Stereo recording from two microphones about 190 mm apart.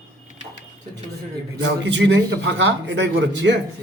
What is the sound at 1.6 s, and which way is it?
A man's voice, 70° right (ahead or behind).